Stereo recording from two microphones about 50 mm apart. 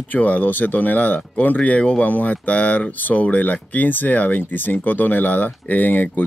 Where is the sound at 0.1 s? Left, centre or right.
Left.